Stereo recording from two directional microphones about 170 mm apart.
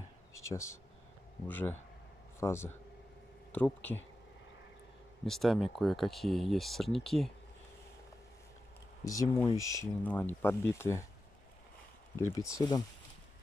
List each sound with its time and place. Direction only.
0.3 s speech: 20° left (ahead or behind)
5.2 s speech: centre (ahead or behind)
9.0 s speech: 20° left (ahead or behind)
12.4 s speech: 20° left (ahead or behind)